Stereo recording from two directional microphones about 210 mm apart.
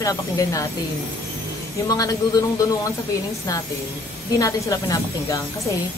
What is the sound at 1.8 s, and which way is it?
Speech, 15° left (ahead or behind).